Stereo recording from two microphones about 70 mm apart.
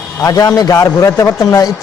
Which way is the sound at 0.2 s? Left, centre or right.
Left.